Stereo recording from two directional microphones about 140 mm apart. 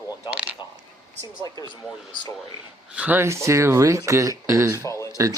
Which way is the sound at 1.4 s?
25° left (ahead or behind).